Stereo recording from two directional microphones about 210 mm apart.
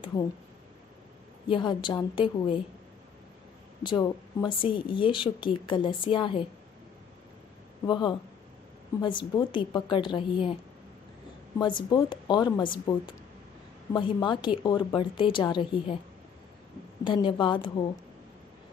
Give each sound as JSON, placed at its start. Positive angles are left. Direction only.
{"t": 1.5, "sound": "speech", "side_deg": 20}
{"t": 3.8, "sound": "speech", "side_deg": 20}
{"t": 7.8, "sound": "speech", "side_deg": 20}
{"t": 17.0, "sound": "speech", "side_deg": 25}